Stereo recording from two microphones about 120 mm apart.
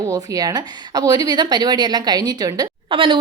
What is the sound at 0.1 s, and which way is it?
A woman's voice, 30° right (ahead or behind).